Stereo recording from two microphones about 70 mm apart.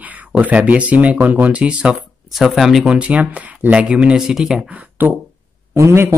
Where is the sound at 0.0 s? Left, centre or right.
Right.